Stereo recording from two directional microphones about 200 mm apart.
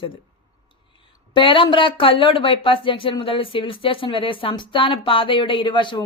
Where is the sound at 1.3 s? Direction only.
25° left (ahead or behind).